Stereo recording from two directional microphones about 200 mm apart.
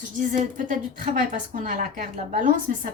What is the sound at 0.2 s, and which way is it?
A woman's voice, 40° right (ahead or behind).